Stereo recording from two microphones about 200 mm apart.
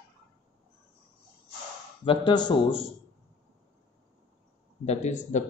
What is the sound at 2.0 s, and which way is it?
Speech, 25° left (ahead or behind).